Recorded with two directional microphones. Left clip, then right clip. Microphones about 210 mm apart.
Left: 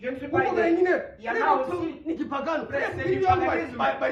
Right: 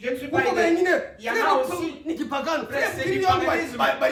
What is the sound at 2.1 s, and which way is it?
A man's voice, 10° right (ahead or behind).